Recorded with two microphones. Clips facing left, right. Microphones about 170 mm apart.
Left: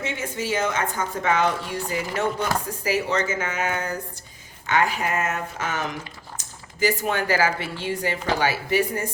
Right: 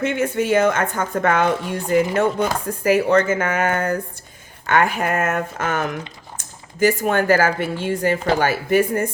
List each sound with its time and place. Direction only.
0.0 s a woman's voice: 55° right (ahead or behind)